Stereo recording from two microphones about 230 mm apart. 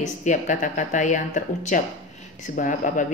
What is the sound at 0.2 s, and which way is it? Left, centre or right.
Speech, left.